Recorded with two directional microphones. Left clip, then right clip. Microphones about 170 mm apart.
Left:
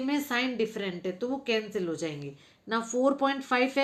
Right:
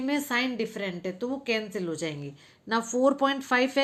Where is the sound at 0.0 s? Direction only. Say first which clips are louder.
Right 2 dB; 25° right (ahead or behind).